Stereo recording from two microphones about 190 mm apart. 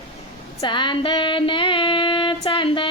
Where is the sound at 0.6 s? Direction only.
25° left (ahead or behind).